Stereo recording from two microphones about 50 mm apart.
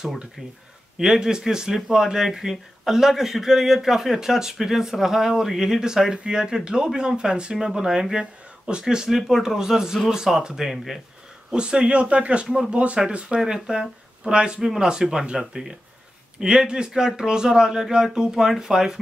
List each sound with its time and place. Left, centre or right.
0.9 s speech: centre
11.5 s a man's voice: centre
13.4 s speech: centre
14.6 s speech: centre